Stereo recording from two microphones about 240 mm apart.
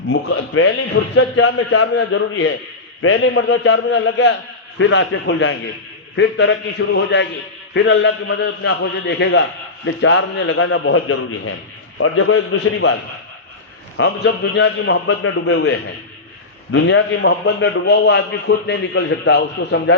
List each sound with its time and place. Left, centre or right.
0.1 s a man's voice: left
12.8 s a man's voice: left
16.7 s a man's voice: left